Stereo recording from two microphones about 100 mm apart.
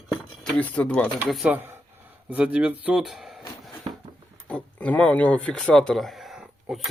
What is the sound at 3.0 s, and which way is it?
Music, 5° right (ahead or behind).